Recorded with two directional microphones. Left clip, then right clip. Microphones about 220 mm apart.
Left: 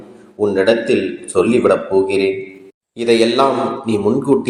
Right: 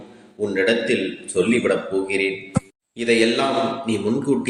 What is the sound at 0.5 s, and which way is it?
Speech, 15° left (ahead or behind).